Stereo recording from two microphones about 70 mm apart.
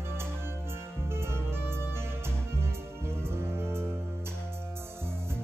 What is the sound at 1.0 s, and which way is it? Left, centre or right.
Music, right.